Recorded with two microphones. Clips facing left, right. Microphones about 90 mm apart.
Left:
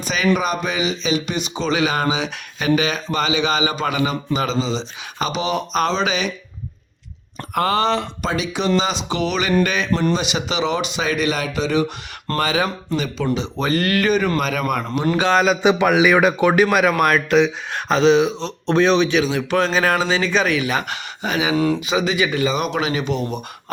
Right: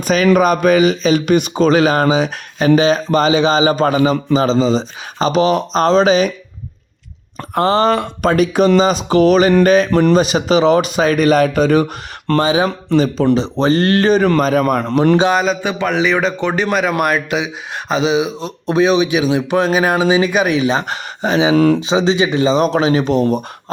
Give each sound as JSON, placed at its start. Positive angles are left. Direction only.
{"t": 0.0, "sound": "speech", "side_deg": -45}
{"t": 7.5, "sound": "speech", "side_deg": -30}
{"t": 7.9, "sound": "speech", "side_deg": -55}
{"t": 12.4, "sound": "speech", "side_deg": -20}
{"t": 13.3, "sound": "speech", "side_deg": -35}
{"t": 15.3, "sound": "speech", "side_deg": 0}
{"t": 15.6, "sound": "a man's voice", "side_deg": 10}
{"t": 20.8, "sound": "speech", "side_deg": -35}
{"t": 21.5, "sound": "speech", "side_deg": -60}
{"t": 21.8, "sound": "speech", "side_deg": -25}